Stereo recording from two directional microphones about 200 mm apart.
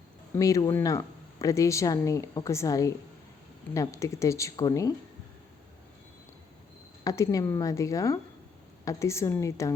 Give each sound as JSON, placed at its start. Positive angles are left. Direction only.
{"t": 0.3, "sound": "speech", "side_deg": 15}
{"t": 7.0, "sound": "speech", "side_deg": 15}